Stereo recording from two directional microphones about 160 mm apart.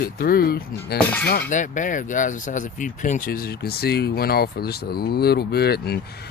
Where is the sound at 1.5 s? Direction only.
50° left (ahead or behind); by 6.0 s 90° left.